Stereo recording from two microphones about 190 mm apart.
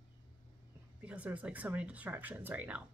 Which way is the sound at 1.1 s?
5° right (ahead or behind).